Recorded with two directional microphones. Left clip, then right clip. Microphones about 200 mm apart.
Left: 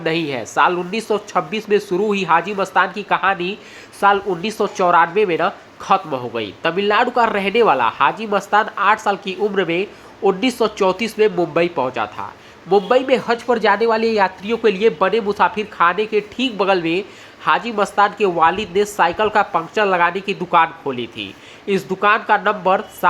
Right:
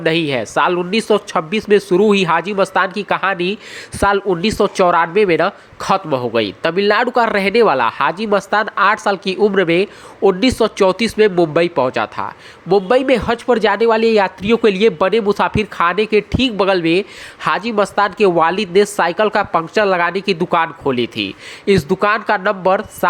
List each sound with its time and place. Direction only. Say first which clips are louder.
0.0 s speech: right 4 dB; 25° right (ahead or behind)